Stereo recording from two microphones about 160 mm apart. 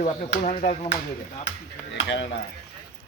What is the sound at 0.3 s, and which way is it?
Speech, 70° left (ahead or behind).